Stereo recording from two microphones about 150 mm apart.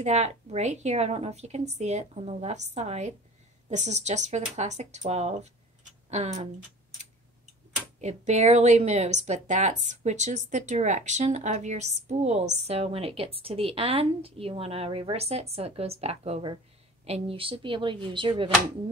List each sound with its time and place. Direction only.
0.0 s speech: 50° right (ahead or behind)
8.0 s speech: 50° right (ahead or behind); by 18.5 s 35° right (ahead or behind)